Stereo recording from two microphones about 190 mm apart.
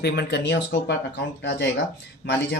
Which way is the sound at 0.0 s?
60° left (ahead or behind).